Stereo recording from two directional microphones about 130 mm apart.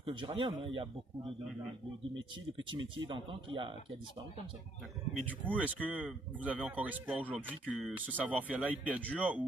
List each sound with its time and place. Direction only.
0.0 s speech: 40° right (ahead or behind)
2.6 s speech: 40° right (ahead or behind)
5.5 s speech: 10° right (ahead or behind)